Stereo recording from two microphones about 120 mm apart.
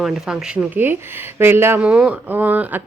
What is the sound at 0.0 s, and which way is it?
Speech, 5° right (ahead or behind).